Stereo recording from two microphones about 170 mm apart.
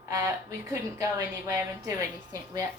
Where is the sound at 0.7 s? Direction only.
20° right (ahead or behind).